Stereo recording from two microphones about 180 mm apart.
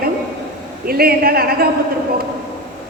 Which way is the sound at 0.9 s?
55° right (ahead or behind).